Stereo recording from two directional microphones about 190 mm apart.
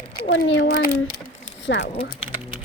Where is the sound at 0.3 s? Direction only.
70° left (ahead or behind).